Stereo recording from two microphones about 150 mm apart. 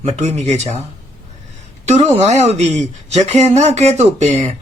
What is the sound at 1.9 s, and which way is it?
Speech, 50° right (ahead or behind).